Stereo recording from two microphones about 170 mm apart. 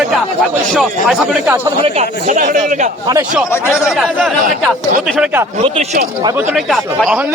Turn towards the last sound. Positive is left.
turn(degrees=0)  # may be behind; listen again after turning